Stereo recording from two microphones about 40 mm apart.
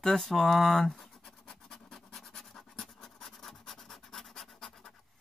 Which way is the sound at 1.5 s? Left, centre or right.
Centre.